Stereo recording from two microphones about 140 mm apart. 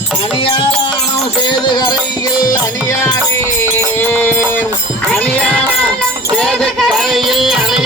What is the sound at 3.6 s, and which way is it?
Music, 15° left (ahead or behind).